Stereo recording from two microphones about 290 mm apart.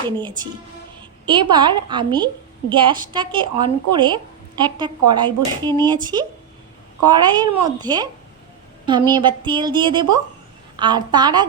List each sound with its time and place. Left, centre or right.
0.2 s a woman's voice: centre